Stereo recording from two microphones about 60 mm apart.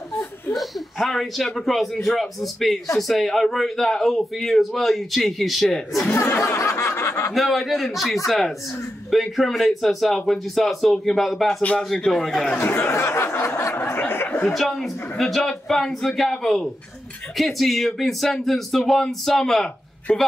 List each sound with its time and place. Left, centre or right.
0.5 s a man's voice: centre
6.4 s snicker: left
7.3 s a man's voice: centre
12.7 s a sound: left
14.5 s a man's voice: centre